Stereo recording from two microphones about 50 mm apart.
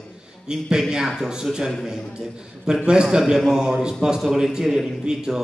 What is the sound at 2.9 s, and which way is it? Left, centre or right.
A man's voice, centre.